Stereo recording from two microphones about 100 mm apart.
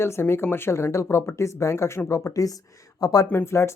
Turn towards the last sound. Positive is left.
turn(degrees=25)  # may be behind; listen again after turning